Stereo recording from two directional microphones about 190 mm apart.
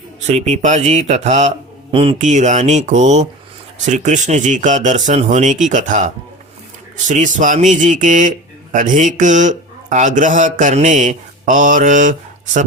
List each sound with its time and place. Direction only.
0.3 s speech: 35° right (ahead or behind)
2.1 s speech: 40° right (ahead or behind)
7.1 s speech: 40° right (ahead or behind)